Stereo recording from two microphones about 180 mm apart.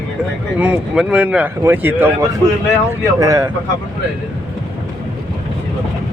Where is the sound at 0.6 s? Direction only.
5° right (ahead or behind).